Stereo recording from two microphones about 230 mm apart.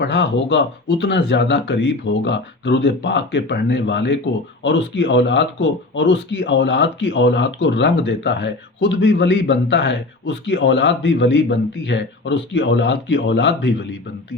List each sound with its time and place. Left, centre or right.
0.0 s speech: left